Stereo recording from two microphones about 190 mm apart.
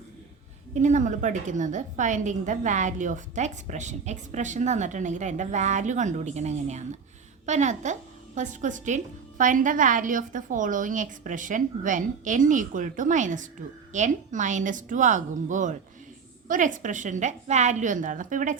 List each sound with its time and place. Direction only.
0.7 s a woman's voice: 40° right (ahead or behind)